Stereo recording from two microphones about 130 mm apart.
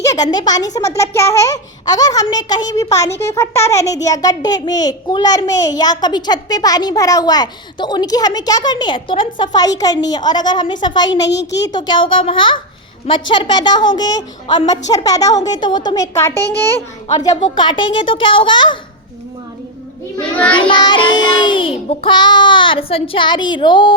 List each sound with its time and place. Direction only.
0.0 s a child's voice: 30° left (ahead or behind)
14.4 s a woman's voice: 45° left (ahead or behind)
14.7 s a child's voice: 30° left (ahead or behind)
17.2 s a child's voice: 30° left (ahead or behind)
20.5 s a child's voice: 40° left (ahead or behind)